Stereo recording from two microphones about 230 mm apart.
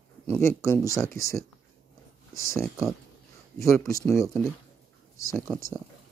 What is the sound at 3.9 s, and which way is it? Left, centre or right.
Speech, centre.